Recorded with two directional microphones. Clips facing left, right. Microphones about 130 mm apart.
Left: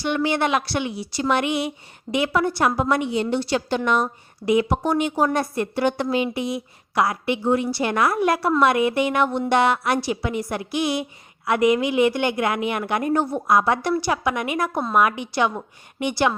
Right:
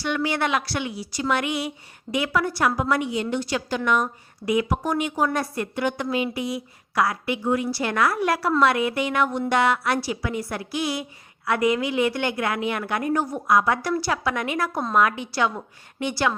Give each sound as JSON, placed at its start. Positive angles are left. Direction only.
{"t": 0.0, "sound": "a woman's voice", "side_deg": 25}